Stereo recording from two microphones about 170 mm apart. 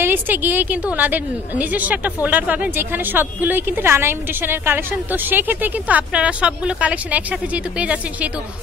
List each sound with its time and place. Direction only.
0.0 s a woman's voice: 10° right (ahead or behind)